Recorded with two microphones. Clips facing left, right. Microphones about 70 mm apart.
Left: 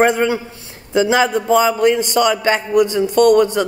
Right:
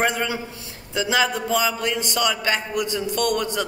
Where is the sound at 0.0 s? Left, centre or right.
Left.